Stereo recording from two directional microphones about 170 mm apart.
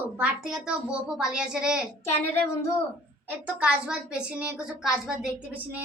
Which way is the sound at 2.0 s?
15° left (ahead or behind).